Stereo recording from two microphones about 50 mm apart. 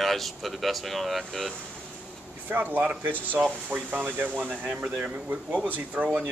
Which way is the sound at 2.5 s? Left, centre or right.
Right.